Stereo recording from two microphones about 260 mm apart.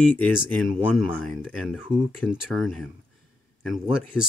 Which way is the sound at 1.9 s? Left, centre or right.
Centre.